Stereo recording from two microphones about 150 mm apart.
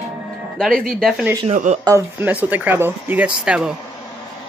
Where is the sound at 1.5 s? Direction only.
55° right (ahead or behind).